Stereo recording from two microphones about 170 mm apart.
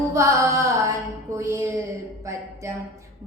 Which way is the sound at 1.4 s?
15° right (ahead or behind).